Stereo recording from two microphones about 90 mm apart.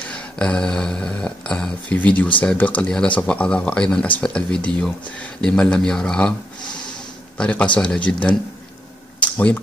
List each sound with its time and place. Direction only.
0.1 s speech: 10° left (ahead or behind)
7.3 s speech: 10° left (ahead or behind)
9.2 s a sound: 15° left (ahead or behind)